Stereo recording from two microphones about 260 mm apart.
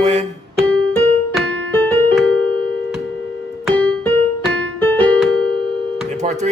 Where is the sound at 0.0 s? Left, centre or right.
Right.